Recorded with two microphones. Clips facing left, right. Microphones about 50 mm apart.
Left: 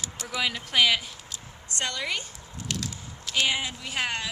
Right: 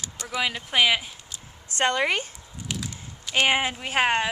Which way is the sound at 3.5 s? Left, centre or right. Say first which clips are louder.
Right 6 dB; right.